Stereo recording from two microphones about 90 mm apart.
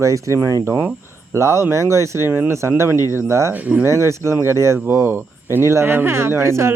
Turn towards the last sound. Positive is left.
turn(degrees=-30)  # may be behind; listen again after turning